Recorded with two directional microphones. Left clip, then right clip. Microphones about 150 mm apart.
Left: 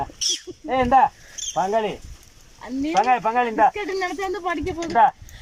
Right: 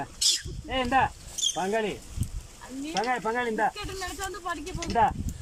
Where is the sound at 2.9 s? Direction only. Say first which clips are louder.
Left 9 dB; 15° left (ahead or behind).